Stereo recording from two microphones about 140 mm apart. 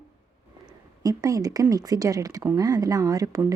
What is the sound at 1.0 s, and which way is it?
A woman's voice, 25° right (ahead or behind).